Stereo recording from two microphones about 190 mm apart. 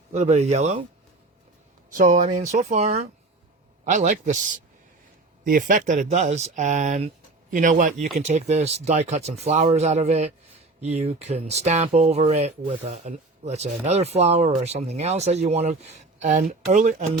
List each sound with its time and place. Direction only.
0.1 s speech: 35° right (ahead or behind)
1.9 s speech: 45° right (ahead or behind)